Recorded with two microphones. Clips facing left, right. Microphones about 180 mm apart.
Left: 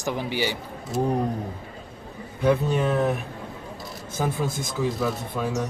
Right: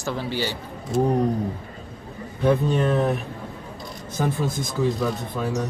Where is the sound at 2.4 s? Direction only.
5° left (ahead or behind).